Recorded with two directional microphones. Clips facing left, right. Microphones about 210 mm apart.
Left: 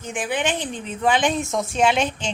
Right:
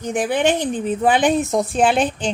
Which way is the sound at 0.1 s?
40° right (ahead or behind).